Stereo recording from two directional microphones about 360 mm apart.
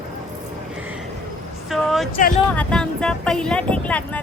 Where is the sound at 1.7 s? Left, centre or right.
Centre.